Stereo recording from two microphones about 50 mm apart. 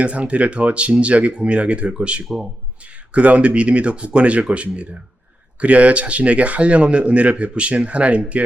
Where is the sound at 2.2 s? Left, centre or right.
Centre.